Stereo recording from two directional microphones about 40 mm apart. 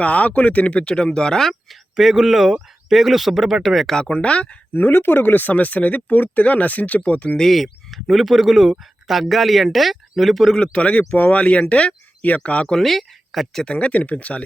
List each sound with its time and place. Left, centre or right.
0.0 s speech: left
2.0 s speech: centre
4.1 s speech: left
4.7 s speech: left
7.3 s speech: centre
10.5 s speech: left
12.8 s speech: centre
13.7 s speech: left